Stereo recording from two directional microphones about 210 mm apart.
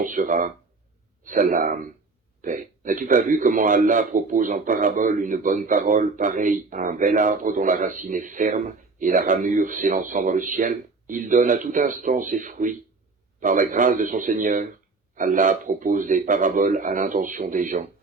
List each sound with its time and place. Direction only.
0.0 s a man's voice: 40° right (ahead or behind)